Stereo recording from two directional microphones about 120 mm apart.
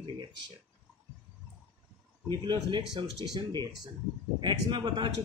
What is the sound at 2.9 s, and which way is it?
Speech, 35° right (ahead or behind).